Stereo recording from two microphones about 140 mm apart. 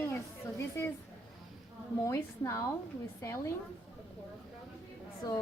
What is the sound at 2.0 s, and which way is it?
A woman's voice, 20° left (ahead or behind).